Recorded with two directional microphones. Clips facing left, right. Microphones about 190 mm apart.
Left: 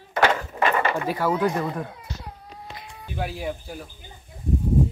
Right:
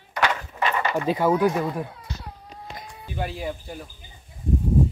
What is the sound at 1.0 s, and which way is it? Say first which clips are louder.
Speech: right 3 dB; 20° right (ahead or behind).